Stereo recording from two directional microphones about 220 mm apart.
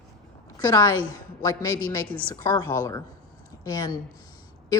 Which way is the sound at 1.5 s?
15° left (ahead or behind).